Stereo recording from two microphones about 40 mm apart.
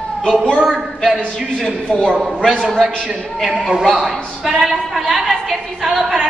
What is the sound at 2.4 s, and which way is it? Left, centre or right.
Speech, centre.